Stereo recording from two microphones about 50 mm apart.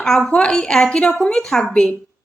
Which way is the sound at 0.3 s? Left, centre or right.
Centre.